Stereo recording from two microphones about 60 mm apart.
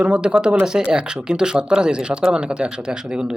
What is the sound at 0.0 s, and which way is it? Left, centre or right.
Speech, centre.